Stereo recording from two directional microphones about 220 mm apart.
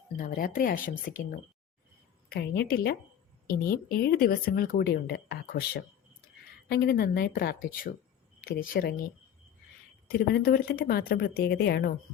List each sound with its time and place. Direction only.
0.2 s speech: 40° left (ahead or behind)
2.3 s a woman's voice: 45° left (ahead or behind)
10.1 s a woman's voice: 45° left (ahead or behind)